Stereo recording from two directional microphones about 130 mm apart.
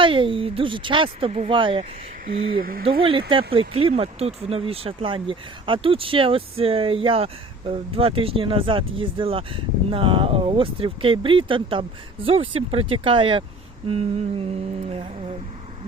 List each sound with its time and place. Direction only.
0.0 s a woman's voice: 40° right (ahead or behind)
2.6 s speech: 90° right
2.8 s speech: 45° right (ahead or behind)